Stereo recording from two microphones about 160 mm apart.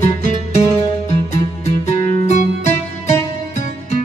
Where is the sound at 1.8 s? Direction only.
40° left (ahead or behind).